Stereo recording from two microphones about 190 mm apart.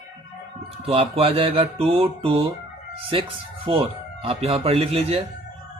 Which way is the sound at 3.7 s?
30° right (ahead or behind).